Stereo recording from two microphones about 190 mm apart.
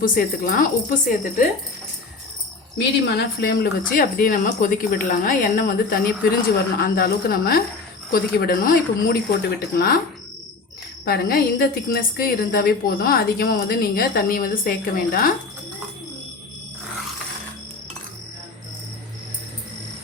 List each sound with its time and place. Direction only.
0.0 s a woman's voice: 45° left (ahead or behind)
2.7 s a woman's voice: 60° left (ahead or behind)
11.0 s a woman's voice: 55° left (ahead or behind)